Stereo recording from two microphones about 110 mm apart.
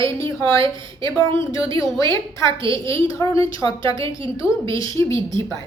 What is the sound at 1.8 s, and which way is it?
A woman's voice, 30° left (ahead or behind).